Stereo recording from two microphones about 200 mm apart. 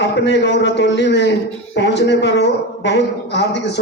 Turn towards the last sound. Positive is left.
turn(degrees=60)  # may be behind; listen again after turning